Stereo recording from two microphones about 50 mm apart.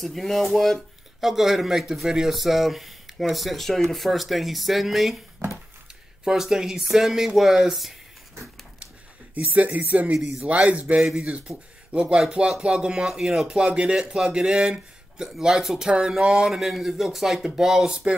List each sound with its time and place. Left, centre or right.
0.0 s speech: centre
6.2 s speech: centre
9.3 s a man's voice: right
13.0 s speech: centre